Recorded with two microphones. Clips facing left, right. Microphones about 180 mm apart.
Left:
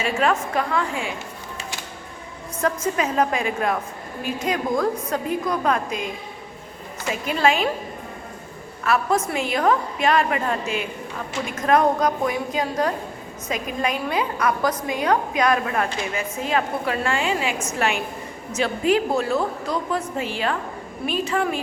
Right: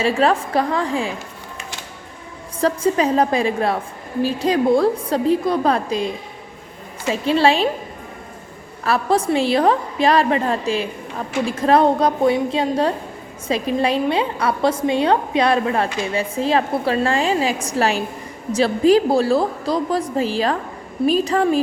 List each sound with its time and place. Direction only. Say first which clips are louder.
0.0 s a woman's voice: right 4 dB; 35° right (ahead or behind)
2.6 s a woman's voice: right 5 dB; 30° right (ahead or behind)
8.8 s a woman's voice: right 3 dB; 35° right (ahead or behind)